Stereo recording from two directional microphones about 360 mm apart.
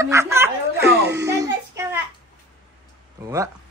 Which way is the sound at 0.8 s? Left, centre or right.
Right.